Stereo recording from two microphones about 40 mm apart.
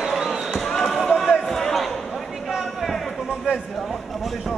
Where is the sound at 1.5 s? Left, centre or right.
Centre.